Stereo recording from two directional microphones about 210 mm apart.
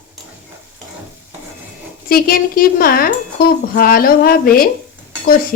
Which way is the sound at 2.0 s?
45° left (ahead or behind).